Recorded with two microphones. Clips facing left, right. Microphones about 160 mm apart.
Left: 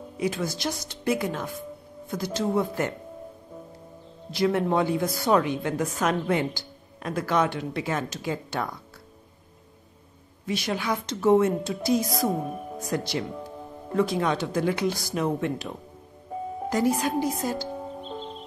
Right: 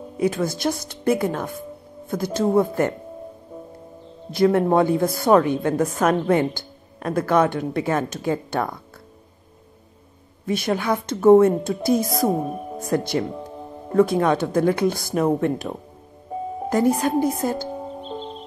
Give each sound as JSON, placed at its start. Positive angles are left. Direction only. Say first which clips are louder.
{"t": 0.2, "sound": "a woman's voice", "louder": "right 6 dB", "side_deg": -50}
{"t": 4.3, "sound": "a woman's voice", "louder": "right 6 dB", "side_deg": -50}
{"t": 10.4, "sound": "a woman's voice", "louder": "right 6 dB", "side_deg": -50}
{"t": 18.0, "sound": "music", "louder": "right 4 dB", "side_deg": -25}